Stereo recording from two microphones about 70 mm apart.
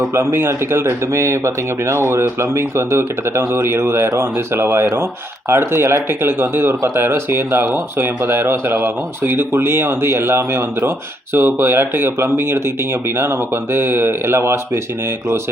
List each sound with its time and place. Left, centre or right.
0.1 s speech: right